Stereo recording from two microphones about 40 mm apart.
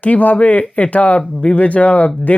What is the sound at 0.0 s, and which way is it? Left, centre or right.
Speech, left.